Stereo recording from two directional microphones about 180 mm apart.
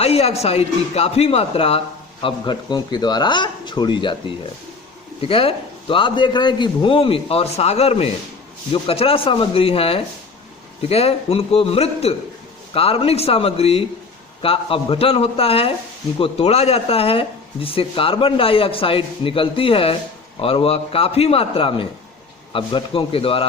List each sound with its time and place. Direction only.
0.0 s a man's voice: 35° left (ahead or behind)
5.2 s speech: 30° left (ahead or behind)